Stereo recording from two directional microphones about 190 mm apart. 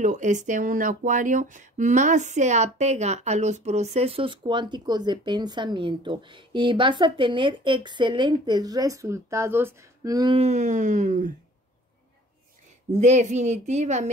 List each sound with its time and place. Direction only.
0.0 s speech: 40° right (ahead or behind); by 10.3 s 20° right (ahead or behind)
10.3 s a woman's voice: 35° right (ahead or behind)
12.9 s a woman's voice: 40° right (ahead or behind)